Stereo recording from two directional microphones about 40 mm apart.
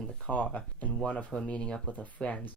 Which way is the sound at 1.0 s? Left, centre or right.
Left.